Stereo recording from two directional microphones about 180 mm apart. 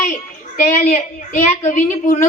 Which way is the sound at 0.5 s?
40° left (ahead or behind).